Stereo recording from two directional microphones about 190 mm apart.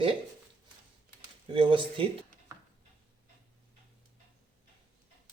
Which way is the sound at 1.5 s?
25° right (ahead or behind).